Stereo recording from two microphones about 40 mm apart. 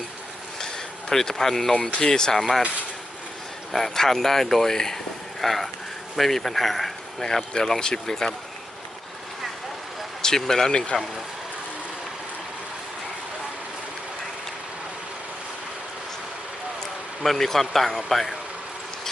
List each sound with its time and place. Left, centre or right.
1.1 s speech: centre
3.7 s speech: centre
10.2 s speech: centre
10.7 s speech: left
17.2 s speech: centre